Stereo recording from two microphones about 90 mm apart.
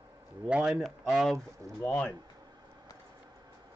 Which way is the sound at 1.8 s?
15° left (ahead or behind).